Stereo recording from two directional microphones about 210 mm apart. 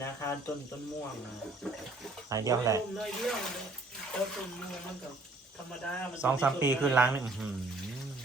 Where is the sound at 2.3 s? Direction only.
15° right (ahead or behind).